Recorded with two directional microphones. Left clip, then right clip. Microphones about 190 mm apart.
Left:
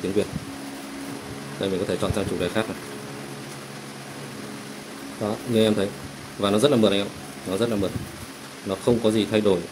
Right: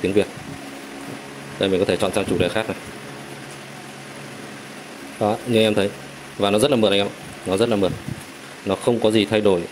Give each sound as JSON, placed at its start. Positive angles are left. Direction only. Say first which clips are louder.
{"t": 0.2, "sound": "a man's voice", "louder": "right 5 dB", "side_deg": -20}
{"t": 1.6, "sound": "a man's voice", "louder": "right 6 dB", "side_deg": -25}
{"t": 5.2, "sound": "a man's voice", "louder": "right 4 dB", "side_deg": -20}